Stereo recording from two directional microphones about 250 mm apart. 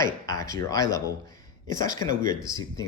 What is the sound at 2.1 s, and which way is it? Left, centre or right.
Speech, right.